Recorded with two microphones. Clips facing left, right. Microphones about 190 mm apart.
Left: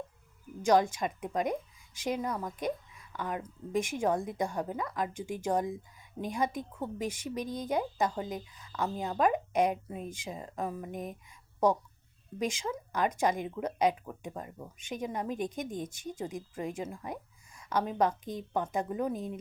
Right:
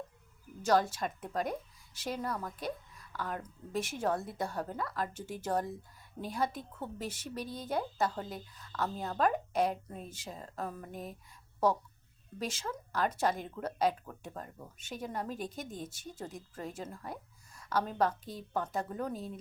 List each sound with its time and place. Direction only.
0.6 s a woman's voice: 15° left (ahead or behind)
8.4 s a woman's voice: centre (ahead or behind)
8.7 s speech: 15° left (ahead or behind)
10.9 s speech: 45° left (ahead or behind)
12.4 s speech: 15° left (ahead or behind)